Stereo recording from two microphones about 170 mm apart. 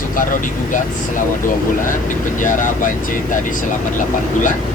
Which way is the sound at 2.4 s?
50° left (ahead or behind).